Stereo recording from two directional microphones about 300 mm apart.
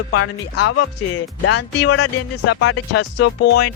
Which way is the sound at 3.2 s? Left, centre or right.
Left.